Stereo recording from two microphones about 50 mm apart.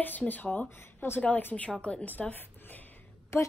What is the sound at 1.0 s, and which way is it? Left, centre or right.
Speech, left.